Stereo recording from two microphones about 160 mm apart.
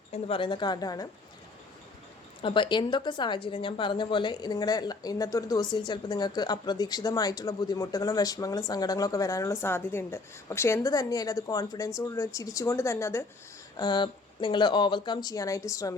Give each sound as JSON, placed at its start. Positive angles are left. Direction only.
{"t": 0.1, "sound": "a woman's voice", "side_deg": 35}
{"t": 2.4, "sound": "a woman's voice", "side_deg": 30}
{"t": 13.7, "sound": "a woman's voice", "side_deg": 25}